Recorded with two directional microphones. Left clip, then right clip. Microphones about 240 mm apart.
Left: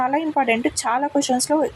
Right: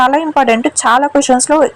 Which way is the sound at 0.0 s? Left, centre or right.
Centre.